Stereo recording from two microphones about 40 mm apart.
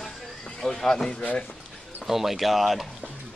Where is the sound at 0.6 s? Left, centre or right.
Centre.